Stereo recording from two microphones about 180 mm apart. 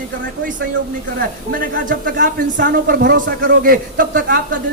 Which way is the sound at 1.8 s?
50° right (ahead or behind).